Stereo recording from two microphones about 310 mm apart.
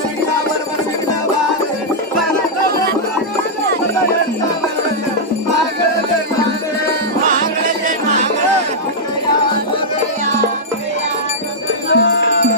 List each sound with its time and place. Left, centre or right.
11.9 s music: left